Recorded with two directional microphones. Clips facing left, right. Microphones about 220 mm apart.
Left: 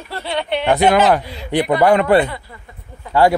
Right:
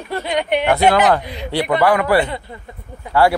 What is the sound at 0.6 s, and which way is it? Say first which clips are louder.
Speech: left 2 dB; 15° left (ahead or behind).